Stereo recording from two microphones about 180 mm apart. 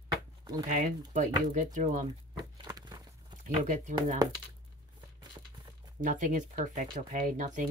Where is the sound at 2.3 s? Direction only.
20° right (ahead or behind).